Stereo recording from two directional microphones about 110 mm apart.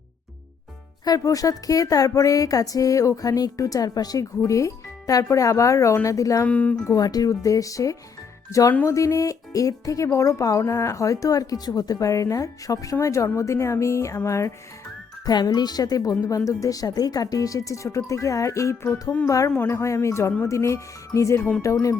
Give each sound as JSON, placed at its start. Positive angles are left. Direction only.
{"t": 1.0, "sound": "speech", "side_deg": 35}
{"t": 6.4, "sound": "speech", "side_deg": 15}
{"t": 6.8, "sound": "speech", "side_deg": 35}
{"t": 15.3, "sound": "speech", "side_deg": 40}